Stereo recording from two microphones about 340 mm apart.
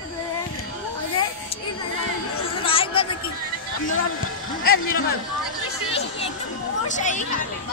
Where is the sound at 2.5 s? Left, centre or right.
Centre.